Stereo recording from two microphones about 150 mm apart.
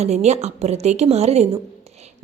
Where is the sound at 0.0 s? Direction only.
45° right (ahead or behind).